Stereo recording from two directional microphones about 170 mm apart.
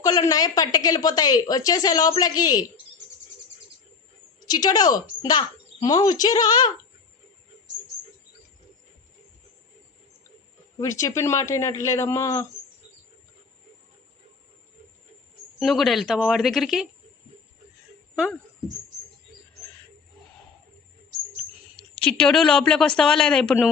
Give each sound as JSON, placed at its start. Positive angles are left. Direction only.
{"t": 0.0, "sound": "a woman's voice", "side_deg": 20}
{"t": 4.4, "sound": "a woman's voice", "side_deg": 25}
{"t": 10.8, "sound": "a man's voice", "side_deg": 20}
{"t": 15.5, "sound": "a woman's voice", "side_deg": 0}
{"t": 22.0, "sound": "a woman's voice", "side_deg": 5}